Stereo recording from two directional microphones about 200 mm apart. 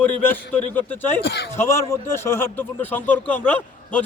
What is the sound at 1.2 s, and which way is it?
Speech, 60° left (ahead or behind).